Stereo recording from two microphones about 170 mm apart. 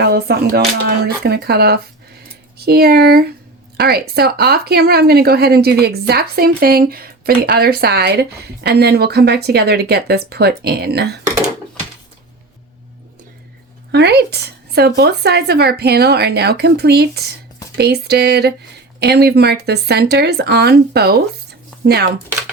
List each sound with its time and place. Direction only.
0.0 s a woman's voice: 70° right (ahead or behind)
13.9 s a woman's voice: 75° right (ahead or behind)